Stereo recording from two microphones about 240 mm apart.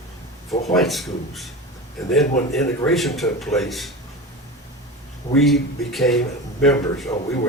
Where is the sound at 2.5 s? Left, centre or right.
Centre.